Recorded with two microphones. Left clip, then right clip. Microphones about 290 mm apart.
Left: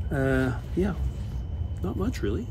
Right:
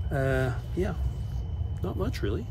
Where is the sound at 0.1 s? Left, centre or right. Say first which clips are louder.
Left 2 dB; centre.